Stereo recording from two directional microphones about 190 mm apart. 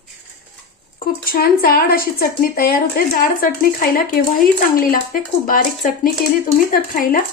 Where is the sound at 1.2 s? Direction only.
50° left (ahead or behind).